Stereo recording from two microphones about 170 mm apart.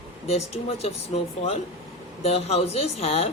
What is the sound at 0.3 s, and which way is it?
Speech, 35° left (ahead or behind).